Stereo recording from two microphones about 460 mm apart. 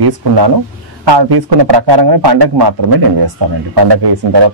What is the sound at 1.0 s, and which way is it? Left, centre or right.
A man's voice, right.